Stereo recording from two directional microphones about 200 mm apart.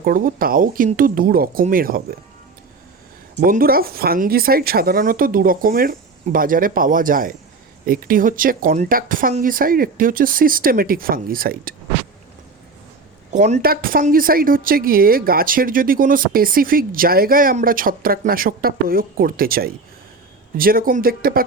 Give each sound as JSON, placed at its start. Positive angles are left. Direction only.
{"t": 0.0, "sound": "speech", "side_deg": -45}
{"t": 3.4, "sound": "speech", "side_deg": -45}
{"t": 13.3, "sound": "speech", "side_deg": -35}